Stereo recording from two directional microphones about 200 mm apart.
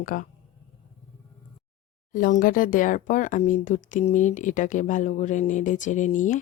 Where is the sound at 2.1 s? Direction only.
40° left (ahead or behind).